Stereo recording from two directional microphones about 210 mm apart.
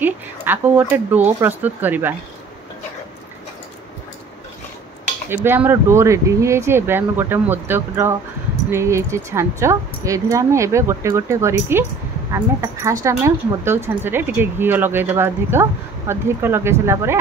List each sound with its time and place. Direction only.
0.0 s speech: 10° right (ahead or behind)
5.3 s speech: 10° right (ahead or behind)
12.8 s speech: 15° right (ahead or behind)